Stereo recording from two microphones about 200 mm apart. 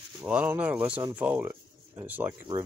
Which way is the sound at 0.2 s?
10° right (ahead or behind).